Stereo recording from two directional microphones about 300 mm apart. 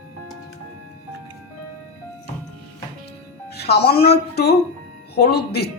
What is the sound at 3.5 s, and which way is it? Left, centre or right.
Speech, left.